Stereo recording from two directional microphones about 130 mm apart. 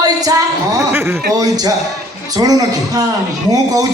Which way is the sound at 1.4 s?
30° right (ahead or behind).